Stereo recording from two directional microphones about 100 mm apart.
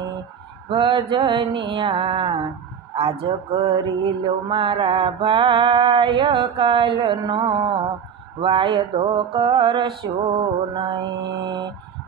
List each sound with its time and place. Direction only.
0.7 s mantra: 55° right (ahead or behind)
6.6 s music: 55° right (ahead or behind)